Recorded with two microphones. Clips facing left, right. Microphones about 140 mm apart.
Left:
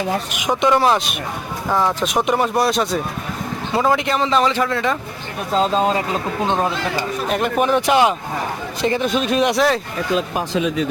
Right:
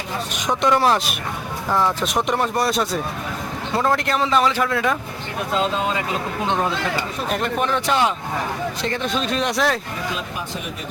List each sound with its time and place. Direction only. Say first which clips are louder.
0.3 s a man's voice: left 1 dB; 5° left (ahead or behind)
5.5 s speech: left 5 dB; 35° left (ahead or behind)
6.5 s speech: left 2 dB; 20° left (ahead or behind)
7.3 s a man's voice: left 4 dB; 5° left (ahead or behind)
7.7 s speech: left 6 dB; 15° left (ahead or behind)
10.5 s speech: left 11 dB; 90° left